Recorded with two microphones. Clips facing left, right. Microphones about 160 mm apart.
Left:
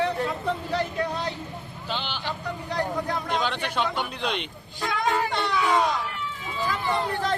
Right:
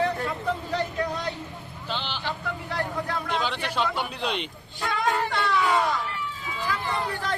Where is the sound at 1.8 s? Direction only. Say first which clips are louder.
Even; 10° left (ahead or behind).